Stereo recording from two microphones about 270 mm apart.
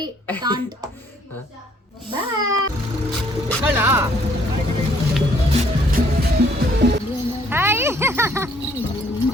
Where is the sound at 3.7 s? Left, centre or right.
Centre.